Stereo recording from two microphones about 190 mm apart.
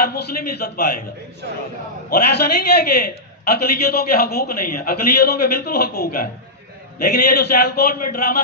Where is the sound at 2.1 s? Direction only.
55° left (ahead or behind).